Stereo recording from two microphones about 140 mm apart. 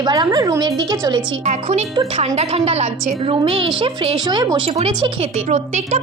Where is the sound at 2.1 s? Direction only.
45° right (ahead or behind); by 4.6 s 30° right (ahead or behind).